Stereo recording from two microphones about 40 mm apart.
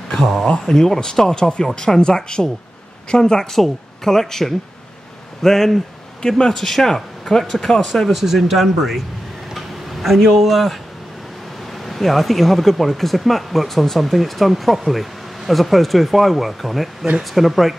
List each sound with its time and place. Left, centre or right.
0.1 s speech: centre
0.5 s a woman's voice: centre
3.5 s speech: centre
8.1 s speech: centre
9.5 s a sound: centre
11.8 s speech: centre